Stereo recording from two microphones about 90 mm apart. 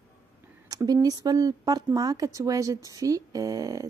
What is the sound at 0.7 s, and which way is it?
Speech, 45° right (ahead or behind).